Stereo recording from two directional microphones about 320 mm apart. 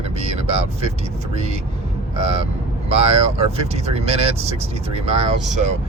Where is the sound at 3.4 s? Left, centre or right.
Centre.